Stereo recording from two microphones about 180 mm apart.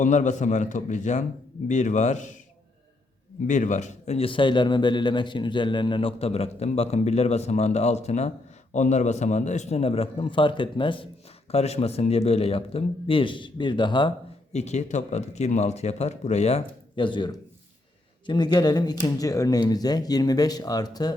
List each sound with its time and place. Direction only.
0.0 s a man's voice: 40° left (ahead or behind)
3.4 s a man's voice: 45° left (ahead or behind); by 14.1 s 25° left (ahead or behind)
14.5 s a man's voice: 40° left (ahead or behind); by 21.1 s 20° left (ahead or behind)